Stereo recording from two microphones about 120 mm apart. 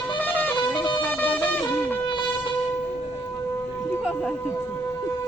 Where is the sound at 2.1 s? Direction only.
40° left (ahead or behind).